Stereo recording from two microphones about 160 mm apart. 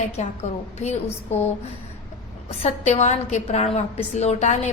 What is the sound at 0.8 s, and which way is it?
Speech, 40° left (ahead or behind).